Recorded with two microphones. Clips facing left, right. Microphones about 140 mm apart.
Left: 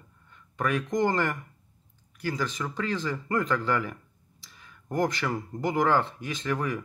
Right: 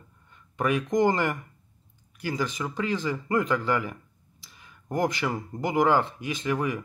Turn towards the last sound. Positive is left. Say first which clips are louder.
# right 2 dB
turn(degrees=-10)  # may be behind; listen again after turning